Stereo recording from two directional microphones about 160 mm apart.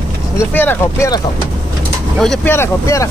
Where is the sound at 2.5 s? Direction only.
15° left (ahead or behind).